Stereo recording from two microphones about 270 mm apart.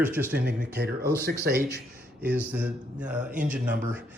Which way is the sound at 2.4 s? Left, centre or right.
Centre.